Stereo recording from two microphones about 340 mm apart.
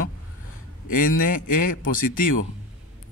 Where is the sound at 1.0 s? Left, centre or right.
Left.